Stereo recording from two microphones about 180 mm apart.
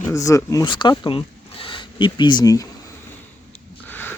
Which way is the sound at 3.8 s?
10° left (ahead or behind).